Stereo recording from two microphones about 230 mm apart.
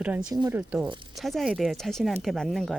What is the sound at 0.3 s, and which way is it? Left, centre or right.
Speech, centre.